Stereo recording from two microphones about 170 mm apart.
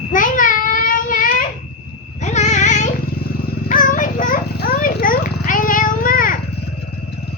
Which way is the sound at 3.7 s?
50° left (ahead or behind).